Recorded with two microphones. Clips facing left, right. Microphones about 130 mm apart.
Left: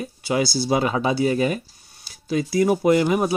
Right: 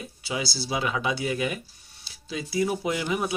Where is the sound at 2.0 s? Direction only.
50° left (ahead or behind).